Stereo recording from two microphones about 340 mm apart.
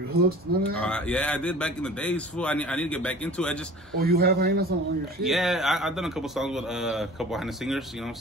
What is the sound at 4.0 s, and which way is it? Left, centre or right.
Speech, right.